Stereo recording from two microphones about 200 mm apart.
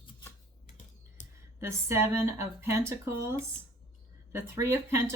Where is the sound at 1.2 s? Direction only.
40° left (ahead or behind).